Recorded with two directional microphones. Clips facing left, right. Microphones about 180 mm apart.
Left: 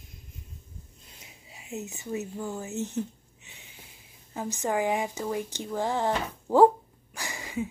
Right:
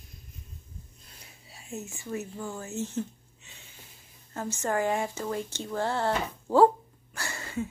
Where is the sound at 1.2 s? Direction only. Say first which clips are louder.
Left 1 dB; 15° left (ahead or behind).